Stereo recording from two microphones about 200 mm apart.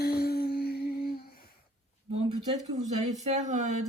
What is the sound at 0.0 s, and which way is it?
Humming, 50° left (ahead or behind).